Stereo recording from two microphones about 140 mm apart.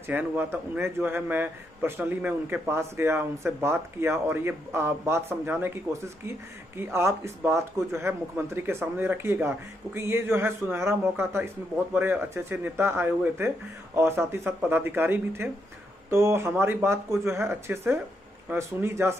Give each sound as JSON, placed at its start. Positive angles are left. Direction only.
{"t": 0.0, "sound": "a man's voice", "side_deg": -15}
{"t": 6.8, "sound": "a man's voice", "side_deg": -20}